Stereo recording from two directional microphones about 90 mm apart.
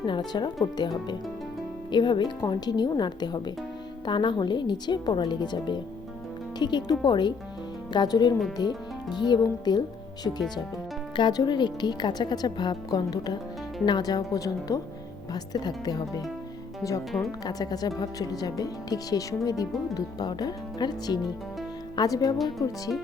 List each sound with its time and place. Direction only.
0.0 s a woman's voice: 60° left (ahead or behind)
11.2 s speech: 50° left (ahead or behind)
17.1 s speech: centre (ahead or behind)
17.4 s speech: 45° left (ahead or behind)